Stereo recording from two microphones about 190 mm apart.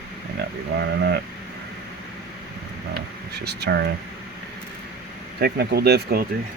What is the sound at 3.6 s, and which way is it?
Speech, 60° right (ahead or behind).